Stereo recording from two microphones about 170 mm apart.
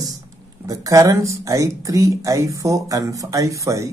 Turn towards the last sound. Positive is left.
turn(degrees=-20)  # may be behind; listen again after turning